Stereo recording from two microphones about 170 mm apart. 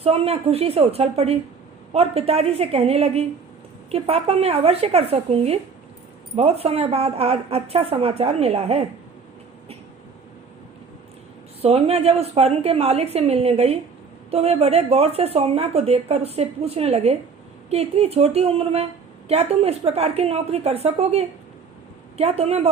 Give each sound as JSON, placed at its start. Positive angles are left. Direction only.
{"t": 0.0, "sound": "speech", "side_deg": -35}
{"t": 11.6, "sound": "speech", "side_deg": -35}